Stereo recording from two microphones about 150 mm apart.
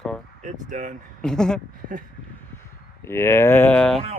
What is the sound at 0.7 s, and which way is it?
Speech, 55° right (ahead or behind).